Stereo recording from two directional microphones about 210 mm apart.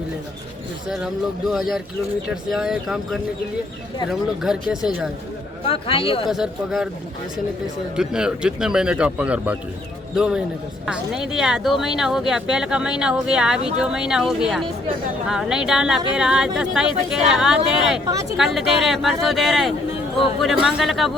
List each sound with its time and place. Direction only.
0.9 s speech: 5° right (ahead or behind)
5.6 s speech: 25° left (ahead or behind)
6.2 s speech: centre (ahead or behind)
7.9 s speech: 5° right (ahead or behind)